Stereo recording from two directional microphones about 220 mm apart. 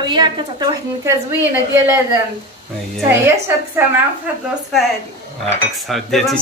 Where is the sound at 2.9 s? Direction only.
10° right (ahead or behind).